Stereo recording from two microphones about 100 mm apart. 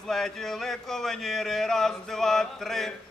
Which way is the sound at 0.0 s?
5° left (ahead or behind).